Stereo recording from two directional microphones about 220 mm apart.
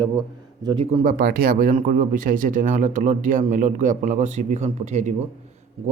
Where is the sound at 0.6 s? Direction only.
20° right (ahead or behind).